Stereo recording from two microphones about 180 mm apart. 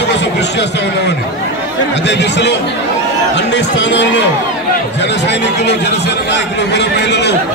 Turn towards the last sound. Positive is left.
turn(degrees=70)  # may be behind; listen again after turning